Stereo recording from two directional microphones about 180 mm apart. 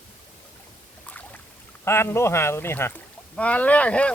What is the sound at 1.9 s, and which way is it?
Speech, 15° left (ahead or behind).